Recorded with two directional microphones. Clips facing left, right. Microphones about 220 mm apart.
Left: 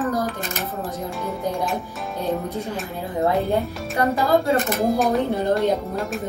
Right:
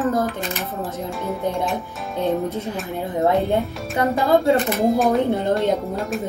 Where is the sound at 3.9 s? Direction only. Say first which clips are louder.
Right 1 dB; centre (ahead or behind).